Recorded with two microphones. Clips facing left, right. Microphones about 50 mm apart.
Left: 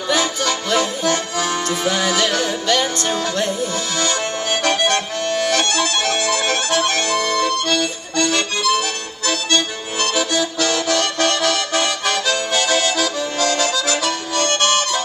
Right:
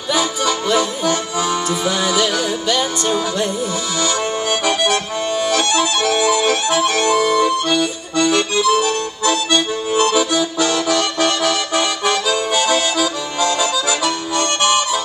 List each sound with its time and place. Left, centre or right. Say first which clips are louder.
0.1 s accordion: right 2 dB; centre
5.5 s music: right 2 dB; centre